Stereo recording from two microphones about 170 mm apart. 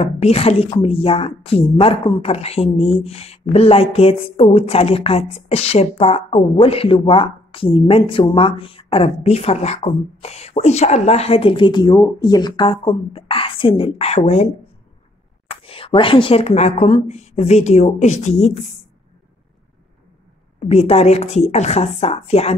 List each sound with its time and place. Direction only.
0.0 s speech: 35° left (ahead or behind)
15.5 s speech: 35° left (ahead or behind)
20.5 s speech: 40° left (ahead or behind)